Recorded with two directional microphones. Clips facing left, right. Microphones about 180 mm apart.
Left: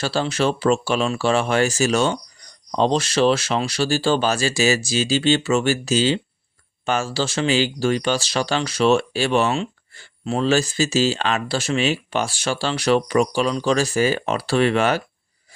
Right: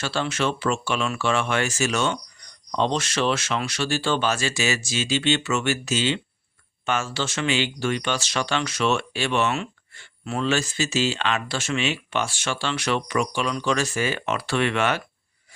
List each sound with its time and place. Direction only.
0.0 s speech: 35° left (ahead or behind)